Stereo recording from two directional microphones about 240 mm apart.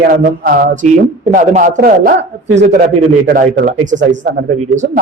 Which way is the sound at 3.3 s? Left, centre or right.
Right.